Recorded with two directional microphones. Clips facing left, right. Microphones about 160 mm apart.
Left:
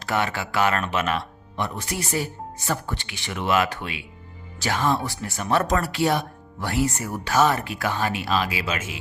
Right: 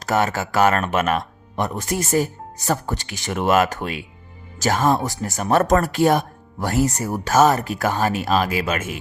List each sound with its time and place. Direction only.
0.0 s speech: 40° right (ahead or behind)